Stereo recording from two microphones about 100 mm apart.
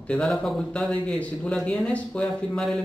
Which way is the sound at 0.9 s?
15° left (ahead or behind).